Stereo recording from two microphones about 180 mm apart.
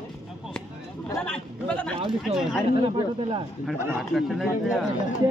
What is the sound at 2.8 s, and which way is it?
Speech, 30° right (ahead or behind).